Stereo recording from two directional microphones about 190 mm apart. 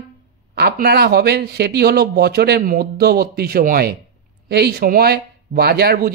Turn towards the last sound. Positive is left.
turn(degrees=-55)  # may be behind; listen again after turning